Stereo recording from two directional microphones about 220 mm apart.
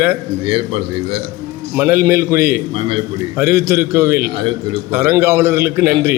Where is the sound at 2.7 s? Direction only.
25° right (ahead or behind).